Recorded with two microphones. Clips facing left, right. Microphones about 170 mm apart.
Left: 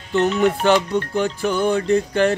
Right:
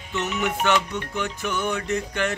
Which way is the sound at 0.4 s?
35° left (ahead or behind).